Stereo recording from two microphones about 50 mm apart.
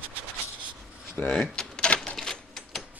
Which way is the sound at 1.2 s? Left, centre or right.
Left.